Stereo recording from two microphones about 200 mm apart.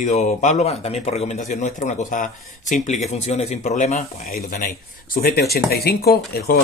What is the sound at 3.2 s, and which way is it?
Speech, 35° left (ahead or behind).